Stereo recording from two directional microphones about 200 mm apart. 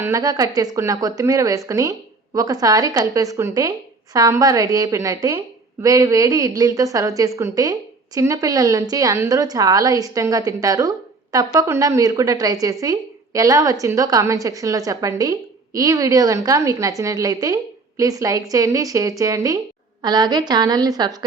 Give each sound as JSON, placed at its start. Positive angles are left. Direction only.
{"t": 0.0, "sound": "a woman's voice", "side_deg": -15}